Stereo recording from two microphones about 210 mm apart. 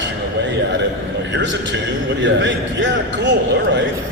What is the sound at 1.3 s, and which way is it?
A man's voice, 60° right (ahead or behind).